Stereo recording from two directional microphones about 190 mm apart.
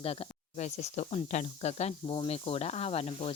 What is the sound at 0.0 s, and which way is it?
Speech, 30° left (ahead or behind).